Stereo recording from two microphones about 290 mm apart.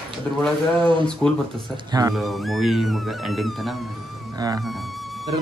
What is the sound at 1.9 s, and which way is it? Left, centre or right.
Speech, centre.